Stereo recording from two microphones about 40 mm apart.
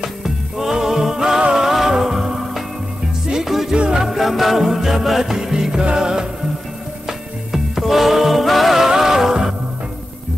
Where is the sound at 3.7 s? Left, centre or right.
Right.